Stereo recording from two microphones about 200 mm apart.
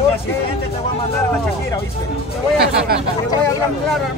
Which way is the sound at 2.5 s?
55° right (ahead or behind).